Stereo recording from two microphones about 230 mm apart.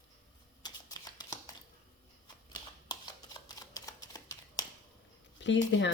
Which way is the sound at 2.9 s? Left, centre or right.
Centre.